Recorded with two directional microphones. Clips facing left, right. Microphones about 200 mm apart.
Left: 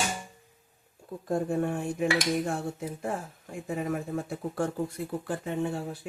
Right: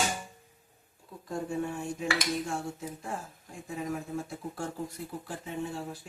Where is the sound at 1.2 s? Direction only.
55° left (ahead or behind).